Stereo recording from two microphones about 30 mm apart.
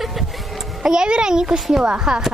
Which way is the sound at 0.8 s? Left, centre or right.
Right.